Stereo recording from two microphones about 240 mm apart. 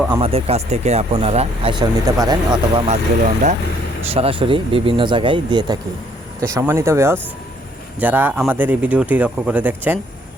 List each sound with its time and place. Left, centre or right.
0.1 s speech: right
4.1 s speech: right; by 10.0 s centre